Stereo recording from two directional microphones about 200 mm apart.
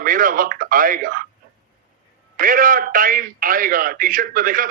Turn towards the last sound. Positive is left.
turn(degrees=-45)  # may be behind; listen again after turning